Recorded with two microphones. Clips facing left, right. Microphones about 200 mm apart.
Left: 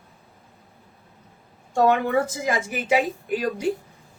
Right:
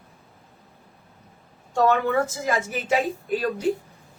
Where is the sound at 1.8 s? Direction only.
15° left (ahead or behind).